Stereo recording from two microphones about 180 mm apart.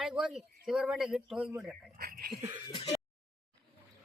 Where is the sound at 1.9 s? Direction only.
55° right (ahead or behind).